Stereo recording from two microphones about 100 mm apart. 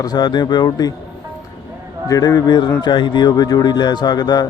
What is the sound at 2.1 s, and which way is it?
A man's voice, 40° left (ahead or behind).